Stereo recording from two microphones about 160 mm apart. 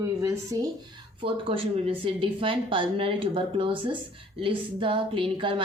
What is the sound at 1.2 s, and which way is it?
A woman's voice, 35° right (ahead or behind).